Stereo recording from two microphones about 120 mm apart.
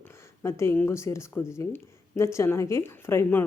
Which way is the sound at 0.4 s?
20° left (ahead or behind).